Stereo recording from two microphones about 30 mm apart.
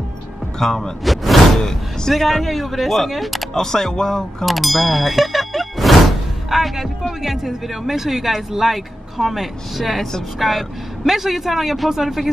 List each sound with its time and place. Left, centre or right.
0.6 s speech: centre
1.0 s a sound: centre
1.6 s speech: centre
2.1 s speech: centre
3.5 s speech: centre
4.5 s speech: centre